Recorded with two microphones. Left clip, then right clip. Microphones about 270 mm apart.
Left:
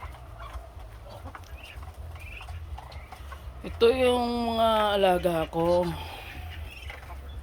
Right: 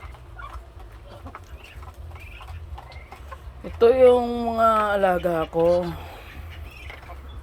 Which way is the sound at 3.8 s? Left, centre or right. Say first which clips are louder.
Right 7 dB; centre.